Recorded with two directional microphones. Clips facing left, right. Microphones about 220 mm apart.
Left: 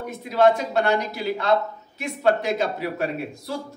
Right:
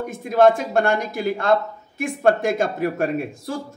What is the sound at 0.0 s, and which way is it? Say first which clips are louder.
Speech: right 3 dB; 50° right (ahead or behind).